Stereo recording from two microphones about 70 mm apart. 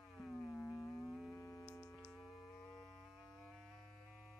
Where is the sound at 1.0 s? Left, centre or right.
Centre.